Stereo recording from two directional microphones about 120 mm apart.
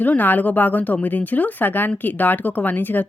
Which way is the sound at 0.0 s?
15° left (ahead or behind).